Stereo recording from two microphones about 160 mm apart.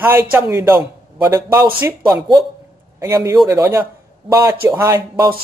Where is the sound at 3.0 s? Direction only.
20° right (ahead or behind).